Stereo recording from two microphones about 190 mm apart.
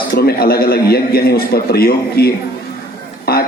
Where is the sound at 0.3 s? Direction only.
55° left (ahead or behind).